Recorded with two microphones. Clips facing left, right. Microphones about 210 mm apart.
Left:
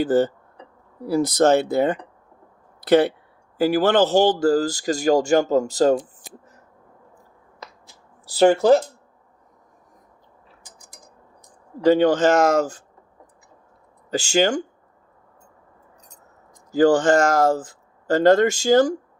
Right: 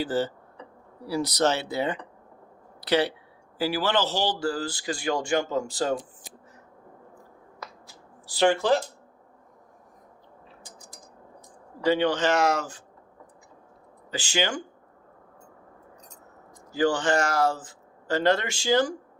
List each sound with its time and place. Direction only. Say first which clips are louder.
0.0 s speech: left 8 dB; 50° left (ahead or behind)
8.4 s speech: left 7 dB; 40° left (ahead or behind)
11.8 s speech: left 7 dB; 45° left (ahead or behind)
14.1 s speech: left 9 dB; 45° left (ahead or behind)
16.7 s speech: left 8 dB; 45° left (ahead or behind)